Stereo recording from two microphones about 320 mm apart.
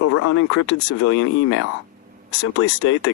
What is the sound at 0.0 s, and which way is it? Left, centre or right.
Speech, left.